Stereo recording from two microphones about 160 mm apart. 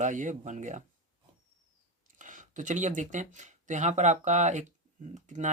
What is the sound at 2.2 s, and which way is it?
Speech, 50° right (ahead or behind).